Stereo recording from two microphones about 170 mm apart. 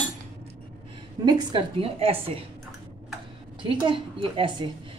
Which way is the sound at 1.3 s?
25° right (ahead or behind).